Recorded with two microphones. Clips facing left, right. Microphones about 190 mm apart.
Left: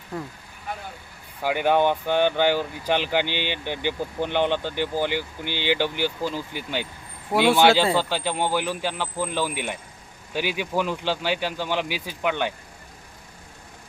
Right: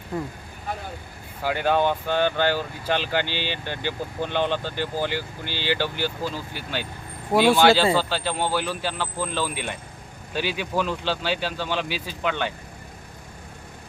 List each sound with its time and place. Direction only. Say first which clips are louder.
1.5 s speech: left 1 dB; 15° left (ahead or behind)